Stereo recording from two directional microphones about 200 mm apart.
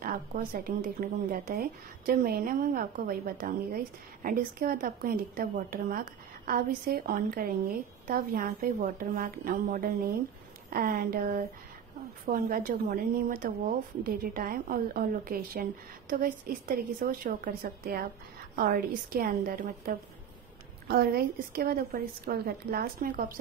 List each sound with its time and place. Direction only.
0.0 s speech: 45° right (ahead or behind)